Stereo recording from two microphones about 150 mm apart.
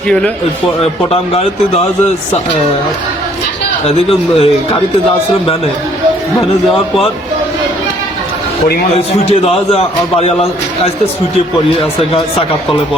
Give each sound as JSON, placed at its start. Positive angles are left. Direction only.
{"t": 3.8, "sound": "a man's voice", "side_deg": 40}
{"t": 9.3, "sound": "a man's voice", "side_deg": 40}